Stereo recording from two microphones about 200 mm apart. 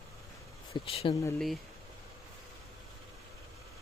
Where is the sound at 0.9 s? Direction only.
25° left (ahead or behind).